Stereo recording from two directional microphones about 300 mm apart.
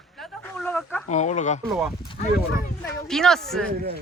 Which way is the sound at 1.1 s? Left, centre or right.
Left.